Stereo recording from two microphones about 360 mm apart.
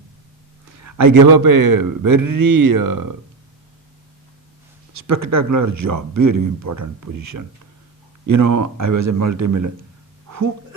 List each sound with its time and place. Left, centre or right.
0.8 s a man's voice: right
5.0 s speech: right
8.3 s speech: right
10.2 s a sound: right